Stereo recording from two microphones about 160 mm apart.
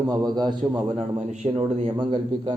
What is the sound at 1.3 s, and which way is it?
Speech, 45° right (ahead or behind).